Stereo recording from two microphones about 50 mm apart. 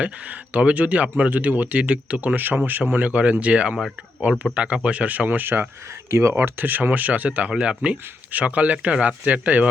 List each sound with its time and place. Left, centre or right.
0.0 s speech: right
6.1 s speech: right
6.6 s speech: right
7.5 s speech: centre
7.8 s speech: right